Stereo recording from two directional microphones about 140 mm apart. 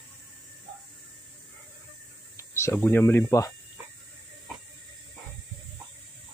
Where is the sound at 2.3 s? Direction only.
20° left (ahead or behind).